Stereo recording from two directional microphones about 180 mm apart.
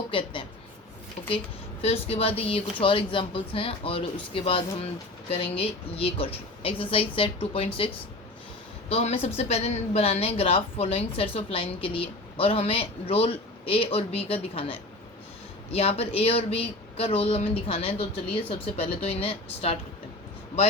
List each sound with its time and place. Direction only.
0.1 s a woman's voice: 30° left (ahead or behind)
1.8 s a woman's voice: 35° left (ahead or behind)
8.9 s a woman's voice: 35° left (ahead or behind)